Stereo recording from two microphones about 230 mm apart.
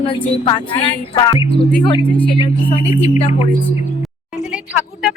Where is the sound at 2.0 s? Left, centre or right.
Centre.